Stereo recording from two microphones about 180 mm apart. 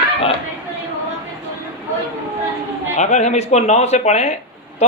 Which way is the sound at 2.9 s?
40° left (ahead or behind).